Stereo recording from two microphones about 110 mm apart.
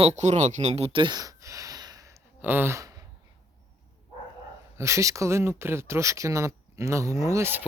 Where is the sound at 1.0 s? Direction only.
40° right (ahead or behind).